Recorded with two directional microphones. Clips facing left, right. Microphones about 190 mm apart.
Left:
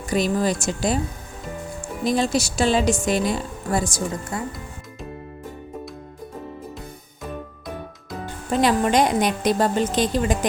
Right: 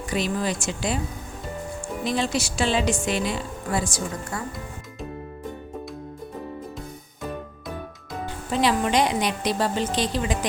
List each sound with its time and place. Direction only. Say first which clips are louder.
0.1 s speech: left 5 dB; 40° left (ahead or behind)
2.0 s a woman's voice: left 5 dB; 40° left (ahead or behind)
4.3 s speech: left 3 dB; 20° left (ahead or behind)
8.4 s a woman's voice: left 3 dB; 45° left (ahead or behind)